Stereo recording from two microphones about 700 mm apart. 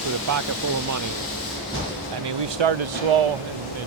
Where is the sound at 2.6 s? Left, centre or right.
Right.